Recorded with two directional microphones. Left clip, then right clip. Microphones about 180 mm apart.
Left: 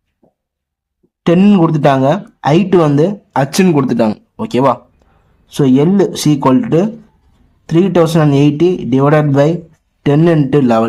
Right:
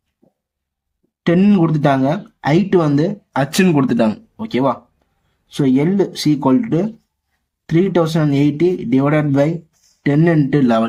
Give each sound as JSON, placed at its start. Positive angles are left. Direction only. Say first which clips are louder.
{"t": 1.2, "sound": "a man's voice", "louder": "left 4 dB", "side_deg": 35}